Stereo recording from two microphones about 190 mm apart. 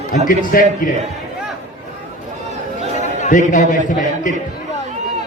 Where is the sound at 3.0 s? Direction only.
40° left (ahead or behind).